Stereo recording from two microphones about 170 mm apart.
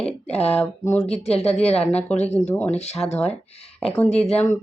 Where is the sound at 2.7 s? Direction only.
40° left (ahead or behind).